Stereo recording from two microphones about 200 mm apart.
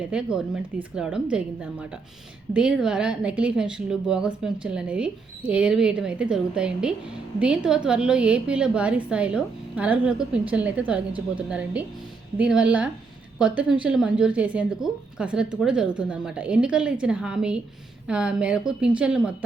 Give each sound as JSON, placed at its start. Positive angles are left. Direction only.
{"t": 0.1, "sound": "a woman's voice", "side_deg": -5}